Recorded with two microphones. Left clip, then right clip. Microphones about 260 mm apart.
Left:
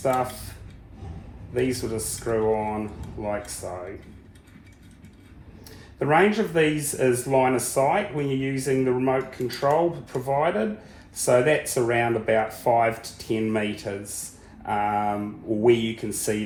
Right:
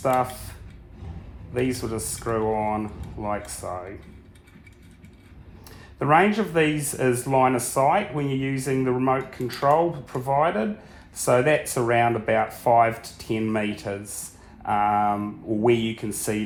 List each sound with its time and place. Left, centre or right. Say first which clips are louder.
0.0 s speech: right 2 dB; right
1.5 s speech: left 1 dB; right
6.0 s speech: right 1 dB; right